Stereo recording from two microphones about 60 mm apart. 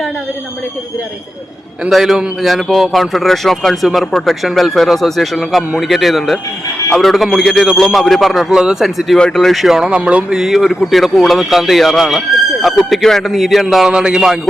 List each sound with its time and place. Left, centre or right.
1.9 s speech: centre
10.1 s speech: centre
10.3 s speech: centre